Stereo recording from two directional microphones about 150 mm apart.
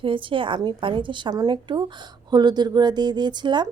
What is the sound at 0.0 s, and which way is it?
A woman's voice, 35° right (ahead or behind).